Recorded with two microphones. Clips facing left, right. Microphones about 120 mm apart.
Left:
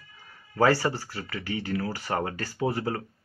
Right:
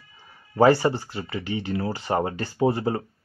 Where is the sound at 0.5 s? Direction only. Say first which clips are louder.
Right 5 dB; 20° right (ahead or behind).